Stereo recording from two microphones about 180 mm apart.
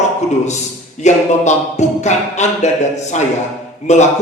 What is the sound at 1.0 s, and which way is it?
Speech, 40° left (ahead or behind).